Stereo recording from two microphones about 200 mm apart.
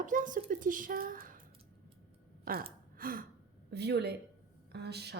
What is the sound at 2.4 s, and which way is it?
Gasp, 45° right (ahead or behind).